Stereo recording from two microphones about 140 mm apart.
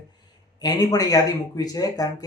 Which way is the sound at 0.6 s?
25° left (ahead or behind).